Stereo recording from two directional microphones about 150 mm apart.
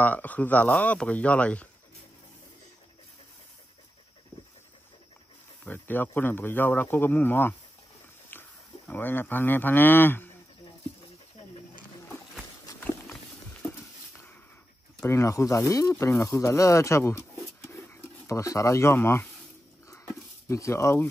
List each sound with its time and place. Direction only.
0.0 s speech: 10° left (ahead or behind)
5.7 s speech: 10° left (ahead or behind)
13.1 s horse: 10° left (ahead or behind)
15.0 s speech: 20° left (ahead or behind)
20.4 s speech: 20° left (ahead or behind)